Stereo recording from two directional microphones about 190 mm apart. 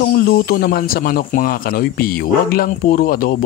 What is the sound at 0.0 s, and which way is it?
Speech, 50° left (ahead or behind).